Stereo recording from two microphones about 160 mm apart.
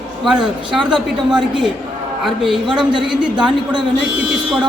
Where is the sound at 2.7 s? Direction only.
30° right (ahead or behind).